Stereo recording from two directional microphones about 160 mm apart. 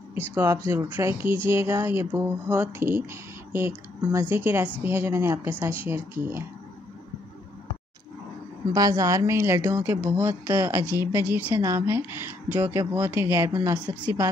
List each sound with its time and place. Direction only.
0.1 s speech: 15° right (ahead or behind)
8.7 s speech: 20° right (ahead or behind)
13.6 s speech: 25° right (ahead or behind)
14.0 s speech: 15° right (ahead or behind)